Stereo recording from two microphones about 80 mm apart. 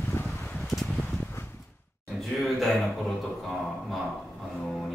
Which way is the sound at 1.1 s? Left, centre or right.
Left.